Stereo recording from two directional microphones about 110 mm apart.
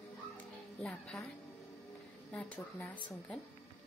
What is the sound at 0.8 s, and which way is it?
Speech, 5° left (ahead or behind).